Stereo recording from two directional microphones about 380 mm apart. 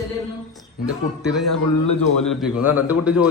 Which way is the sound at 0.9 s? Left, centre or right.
Centre.